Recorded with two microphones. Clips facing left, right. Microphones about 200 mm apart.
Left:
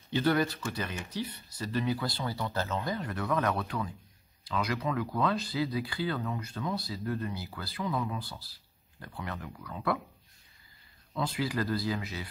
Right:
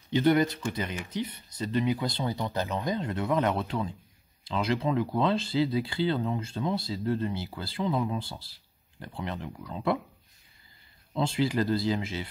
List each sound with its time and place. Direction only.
0.1 s speech: 20° right (ahead or behind)
11.1 s speech: 25° right (ahead or behind)